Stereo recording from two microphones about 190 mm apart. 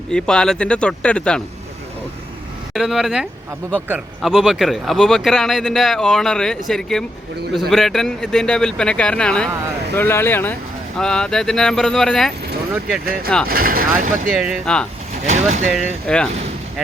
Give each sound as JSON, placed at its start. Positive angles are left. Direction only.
{"t": 0.1, "sound": "speech", "side_deg": 5}
{"t": 2.7, "sound": "a man's voice", "side_deg": 0}
{"t": 13.5, "sound": "speech", "side_deg": -50}
{"t": 14.3, "sound": "speech", "side_deg": -5}
{"t": 15.3, "sound": "speech", "side_deg": -35}
{"t": 15.7, "sound": "speech", "side_deg": 0}